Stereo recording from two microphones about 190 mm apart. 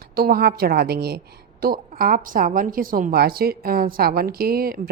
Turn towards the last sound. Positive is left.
turn(degrees=-50)  # may be behind; listen again after turning